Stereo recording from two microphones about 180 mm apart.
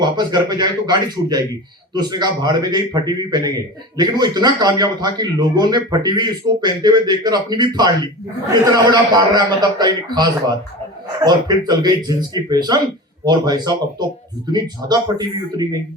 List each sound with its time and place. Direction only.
0.0 s a man's voice: 25° right (ahead or behind)